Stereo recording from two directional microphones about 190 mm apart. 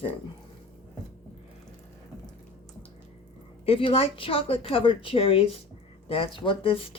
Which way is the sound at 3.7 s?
30° left (ahead or behind).